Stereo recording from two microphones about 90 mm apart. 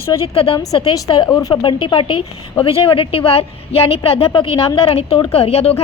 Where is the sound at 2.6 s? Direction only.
80° left.